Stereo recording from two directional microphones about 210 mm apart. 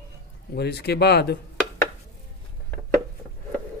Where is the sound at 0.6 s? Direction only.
50° left (ahead or behind).